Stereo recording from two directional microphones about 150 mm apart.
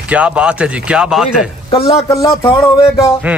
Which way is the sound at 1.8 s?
25° left (ahead or behind).